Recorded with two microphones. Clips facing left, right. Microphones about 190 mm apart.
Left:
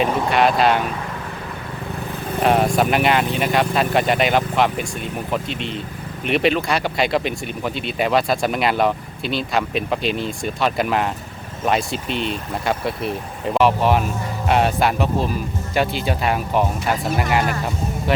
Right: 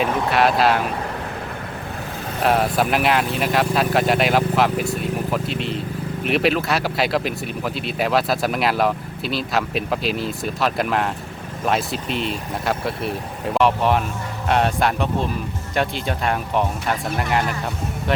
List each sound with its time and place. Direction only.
0.0 s speech: centre (ahead or behind)
2.4 s speech: centre (ahead or behind)